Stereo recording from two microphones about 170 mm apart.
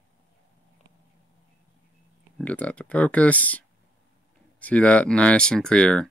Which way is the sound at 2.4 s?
5° left (ahead or behind).